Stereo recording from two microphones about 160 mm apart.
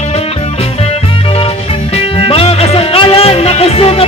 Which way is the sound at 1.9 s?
40° left (ahead or behind).